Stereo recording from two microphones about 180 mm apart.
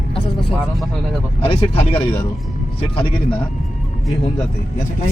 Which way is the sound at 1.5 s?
30° left (ahead or behind).